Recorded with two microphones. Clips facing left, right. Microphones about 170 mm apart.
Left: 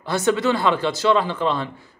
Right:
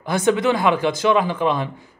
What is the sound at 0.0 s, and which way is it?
Speech, 15° right (ahead or behind).